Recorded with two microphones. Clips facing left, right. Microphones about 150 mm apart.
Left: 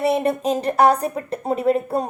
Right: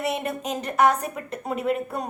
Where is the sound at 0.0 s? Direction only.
30° left (ahead or behind).